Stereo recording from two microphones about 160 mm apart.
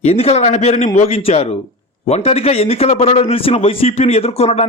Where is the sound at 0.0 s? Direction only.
40° left (ahead or behind).